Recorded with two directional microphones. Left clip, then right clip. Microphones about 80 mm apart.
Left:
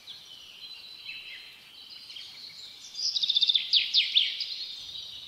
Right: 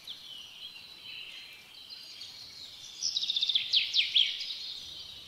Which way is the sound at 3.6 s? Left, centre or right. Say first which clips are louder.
Left 3 dB; centre.